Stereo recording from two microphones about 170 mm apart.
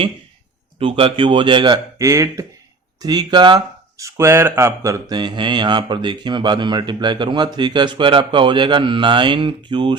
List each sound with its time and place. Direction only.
0.8 s speech: 30° right (ahead or behind)